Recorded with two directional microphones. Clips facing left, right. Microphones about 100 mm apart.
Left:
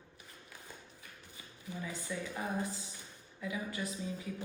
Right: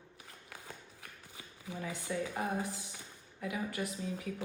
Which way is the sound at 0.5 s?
90° right.